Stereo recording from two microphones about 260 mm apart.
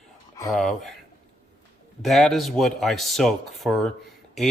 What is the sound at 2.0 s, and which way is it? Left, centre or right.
Speech, centre.